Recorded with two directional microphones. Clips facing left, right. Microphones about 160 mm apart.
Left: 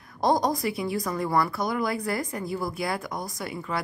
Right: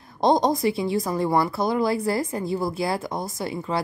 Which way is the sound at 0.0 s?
25° right (ahead or behind).